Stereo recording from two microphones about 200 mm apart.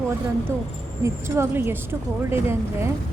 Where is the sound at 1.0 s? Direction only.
10° right (ahead or behind).